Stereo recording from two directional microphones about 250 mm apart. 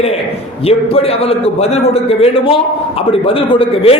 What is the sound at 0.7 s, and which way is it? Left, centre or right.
A man's voice, left.